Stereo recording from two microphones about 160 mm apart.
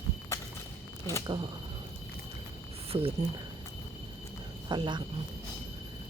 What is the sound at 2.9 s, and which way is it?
Speech, 35° right (ahead or behind).